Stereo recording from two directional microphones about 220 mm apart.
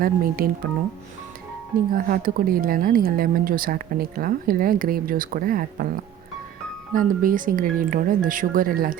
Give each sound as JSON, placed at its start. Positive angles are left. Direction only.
{"t": 0.0, "sound": "speech", "side_deg": -40}
{"t": 2.0, "sound": "speech", "side_deg": -40}
{"t": 6.9, "sound": "speech", "side_deg": -40}